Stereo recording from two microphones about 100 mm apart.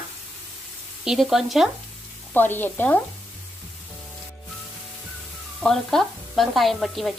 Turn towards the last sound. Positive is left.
turn(degrees=0)  # may be behind; listen again after turning